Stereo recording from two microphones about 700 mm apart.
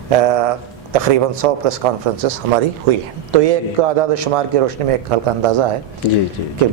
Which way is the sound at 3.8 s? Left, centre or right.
Right.